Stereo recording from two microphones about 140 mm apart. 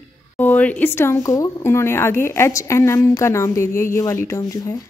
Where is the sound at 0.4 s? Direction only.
10° left (ahead or behind).